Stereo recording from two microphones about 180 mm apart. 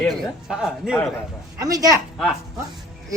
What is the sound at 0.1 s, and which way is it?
Speech, 5° right (ahead or behind).